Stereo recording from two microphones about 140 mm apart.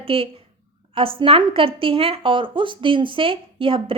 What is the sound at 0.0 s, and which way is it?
A woman's voice, 40° right (ahead or behind).